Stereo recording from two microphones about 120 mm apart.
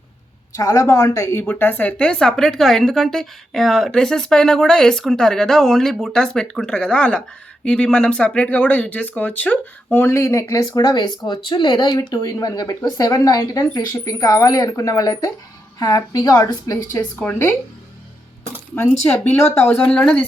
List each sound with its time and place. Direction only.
0.5 s a woman's voice: 30° left (ahead or behind)
17.2 s speech: 20° left (ahead or behind)
19.0 s speech: 10° left (ahead or behind)